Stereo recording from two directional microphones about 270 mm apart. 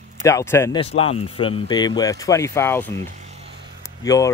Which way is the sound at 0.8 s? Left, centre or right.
Left.